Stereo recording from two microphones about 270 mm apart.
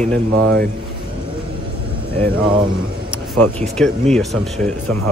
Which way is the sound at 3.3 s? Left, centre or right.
Centre.